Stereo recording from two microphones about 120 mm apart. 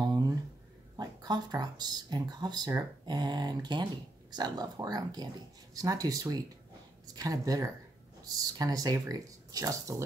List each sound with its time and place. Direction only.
0.9 s speech: 35° right (ahead or behind)